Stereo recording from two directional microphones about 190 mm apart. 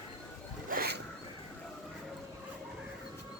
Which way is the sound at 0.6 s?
50° right (ahead or behind).